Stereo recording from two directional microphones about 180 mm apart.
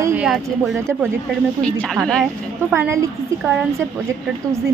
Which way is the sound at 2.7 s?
15° right (ahead or behind).